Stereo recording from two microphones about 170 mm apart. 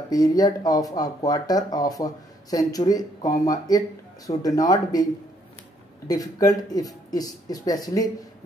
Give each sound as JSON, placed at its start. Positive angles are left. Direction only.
{"t": 0.1, "sound": "speech", "side_deg": 20}
{"t": 6.0, "sound": "speech", "side_deg": 20}